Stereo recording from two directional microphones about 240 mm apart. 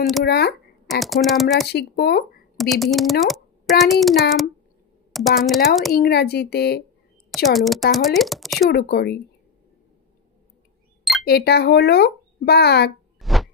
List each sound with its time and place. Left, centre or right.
0.3 s a child's voice: left
0.8 s speech: centre
1.7 s a child's voice: left
2.5 s a woman's voice: centre
5.9 s a child's voice: left
7.2 s a woman's voice: centre
8.7 s a child's voice: left
11.2 s a child's voice: left
13.2 s a sound: centre